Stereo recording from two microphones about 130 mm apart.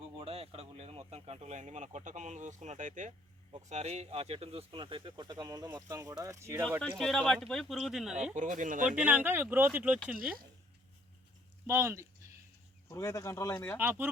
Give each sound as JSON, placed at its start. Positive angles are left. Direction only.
{"t": 0.0, "sound": "a sound", "side_deg": -50}
{"t": 3.7, "sound": "speech", "side_deg": -60}
{"t": 6.7, "sound": "speech", "side_deg": 10}
{"t": 8.1, "sound": "speech", "side_deg": -70}
{"t": 8.9, "sound": "speech", "side_deg": -10}
{"t": 11.6, "sound": "speech", "side_deg": -20}
{"t": 12.9, "sound": "speech", "side_deg": 25}
{"t": 13.7, "sound": "speech", "side_deg": -15}